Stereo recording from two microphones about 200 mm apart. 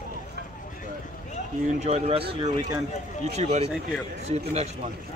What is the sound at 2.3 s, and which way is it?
Speech, 20° right (ahead or behind).